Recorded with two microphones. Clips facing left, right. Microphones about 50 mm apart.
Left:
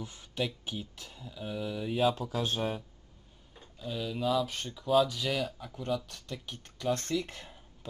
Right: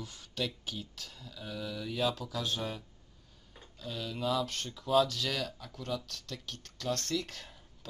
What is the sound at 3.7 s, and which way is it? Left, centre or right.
Speech, centre.